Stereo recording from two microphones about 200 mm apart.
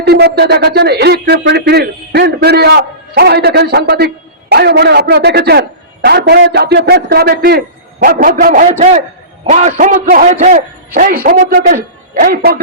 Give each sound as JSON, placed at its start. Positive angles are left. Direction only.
{"t": 0.0, "sound": "a man's voice", "side_deg": -55}